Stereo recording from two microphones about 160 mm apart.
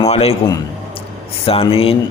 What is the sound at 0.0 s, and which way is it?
Speech, 40° left (ahead or behind).